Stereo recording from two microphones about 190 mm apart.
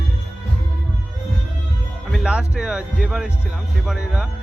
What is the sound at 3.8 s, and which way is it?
Speech, 5° right (ahead or behind).